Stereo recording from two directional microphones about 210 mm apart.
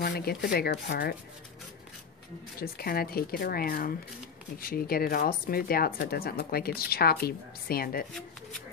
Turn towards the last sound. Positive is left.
turn(degrees=45)  # may be behind; listen again after turning